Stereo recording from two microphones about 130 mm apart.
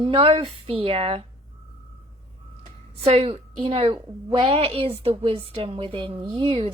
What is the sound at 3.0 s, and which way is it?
A woman's voice, 50° right (ahead or behind).